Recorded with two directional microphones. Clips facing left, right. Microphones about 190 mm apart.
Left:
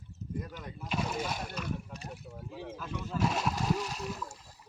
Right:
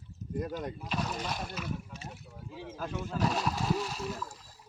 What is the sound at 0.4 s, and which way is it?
Speech, 45° right (ahead or behind).